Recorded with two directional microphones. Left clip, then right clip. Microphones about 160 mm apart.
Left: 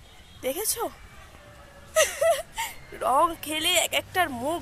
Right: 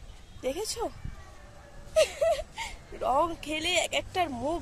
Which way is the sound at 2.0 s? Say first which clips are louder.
Left 3 dB; centre (ahead or behind).